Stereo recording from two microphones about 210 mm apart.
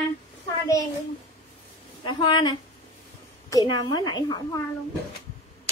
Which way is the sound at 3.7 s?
20° left (ahead or behind).